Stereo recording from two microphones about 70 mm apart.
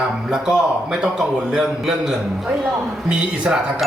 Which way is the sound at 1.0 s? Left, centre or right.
Centre.